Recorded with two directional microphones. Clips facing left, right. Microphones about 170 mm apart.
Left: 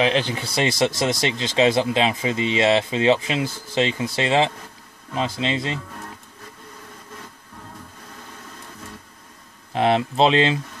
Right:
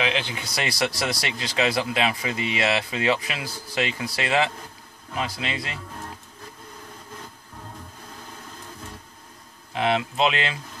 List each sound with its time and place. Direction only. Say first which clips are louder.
0.0 s speech: left 6 dB; 35° left (ahead or behind)
0.6 s speech: left 6 dB; 25° left (ahead or behind)
9.7 s speech: left 4 dB; 35° left (ahead or behind)